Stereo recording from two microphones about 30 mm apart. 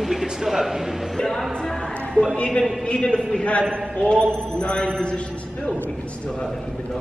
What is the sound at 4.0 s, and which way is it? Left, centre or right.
Speech, left.